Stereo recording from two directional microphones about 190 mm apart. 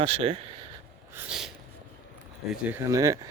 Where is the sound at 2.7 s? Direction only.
15° right (ahead or behind).